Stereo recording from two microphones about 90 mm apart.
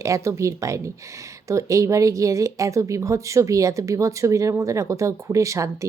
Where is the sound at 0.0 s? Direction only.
35° right (ahead or behind).